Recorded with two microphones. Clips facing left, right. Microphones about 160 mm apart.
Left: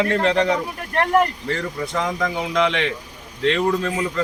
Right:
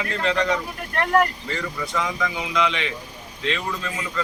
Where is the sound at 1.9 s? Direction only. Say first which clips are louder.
Left 3 dB; 50° left (ahead or behind).